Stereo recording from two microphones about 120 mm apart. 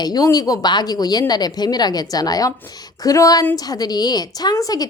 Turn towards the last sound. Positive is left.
turn(degrees=30)  # may be behind; listen again after turning